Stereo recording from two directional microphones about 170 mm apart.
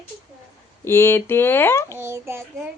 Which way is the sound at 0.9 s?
15° left (ahead or behind).